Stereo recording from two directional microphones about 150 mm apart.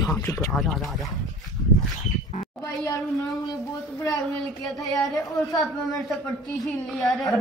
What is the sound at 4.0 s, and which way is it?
Speech, 25° left (ahead or behind).